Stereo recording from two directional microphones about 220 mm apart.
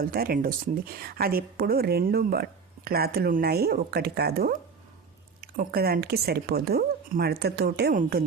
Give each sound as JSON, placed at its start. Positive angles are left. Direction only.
{"t": 0.0, "sound": "speech", "side_deg": -40}